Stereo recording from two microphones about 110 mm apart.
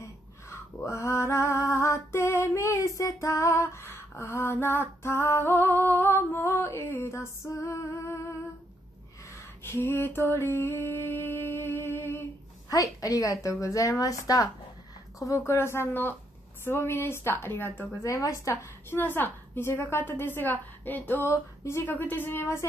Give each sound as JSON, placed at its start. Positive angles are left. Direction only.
{"t": 0.8, "sound": "female singing", "side_deg": 25}
{"t": 9.3, "sound": "a sound", "side_deg": 25}
{"t": 12.6, "sound": "a woman's voice", "side_deg": 30}